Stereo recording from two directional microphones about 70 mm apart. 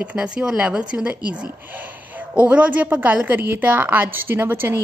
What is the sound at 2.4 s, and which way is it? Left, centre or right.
A woman's voice, centre.